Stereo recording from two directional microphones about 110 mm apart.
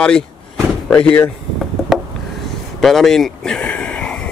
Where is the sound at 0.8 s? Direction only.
10° left (ahead or behind).